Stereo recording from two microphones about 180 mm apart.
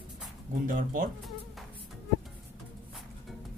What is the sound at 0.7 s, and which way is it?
Speech, 50° right (ahead or behind).